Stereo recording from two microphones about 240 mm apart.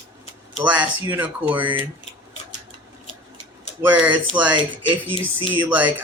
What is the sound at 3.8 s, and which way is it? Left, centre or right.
Speech, centre.